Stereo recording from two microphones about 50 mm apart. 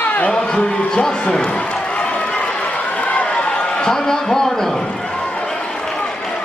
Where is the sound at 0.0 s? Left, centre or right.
Left.